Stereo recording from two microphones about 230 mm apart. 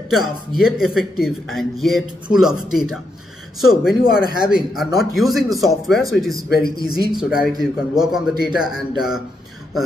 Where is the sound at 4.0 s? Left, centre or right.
Left.